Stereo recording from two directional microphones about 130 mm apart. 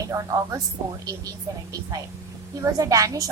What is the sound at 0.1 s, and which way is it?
Speech, 25° right (ahead or behind).